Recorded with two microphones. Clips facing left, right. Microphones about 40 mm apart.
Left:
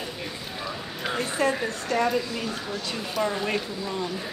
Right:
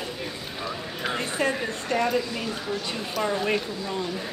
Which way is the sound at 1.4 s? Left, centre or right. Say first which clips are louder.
Left 2 dB; right.